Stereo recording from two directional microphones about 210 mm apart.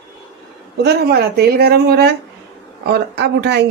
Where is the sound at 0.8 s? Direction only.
50° right (ahead or behind).